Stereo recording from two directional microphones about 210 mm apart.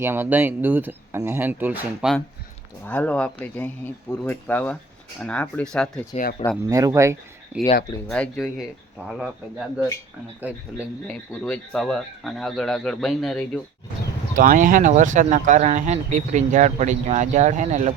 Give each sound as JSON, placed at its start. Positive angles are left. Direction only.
{"t": 0.0, "sound": "speech", "side_deg": -10}
{"t": 2.8, "sound": "speech", "side_deg": 10}
{"t": 6.7, "sound": "speech", "side_deg": -15}
{"t": 8.0, "sound": "speech", "side_deg": 5}
{"t": 11.1, "sound": "speech", "side_deg": 5}
{"t": 14.3, "sound": "speech", "side_deg": -40}